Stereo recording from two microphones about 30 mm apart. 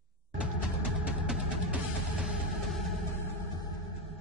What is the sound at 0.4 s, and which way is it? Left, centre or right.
Music, right.